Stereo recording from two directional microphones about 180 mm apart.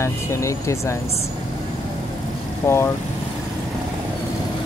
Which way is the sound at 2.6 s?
15° left (ahead or behind).